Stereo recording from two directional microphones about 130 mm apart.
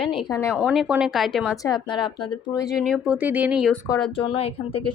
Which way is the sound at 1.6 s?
35° left (ahead or behind).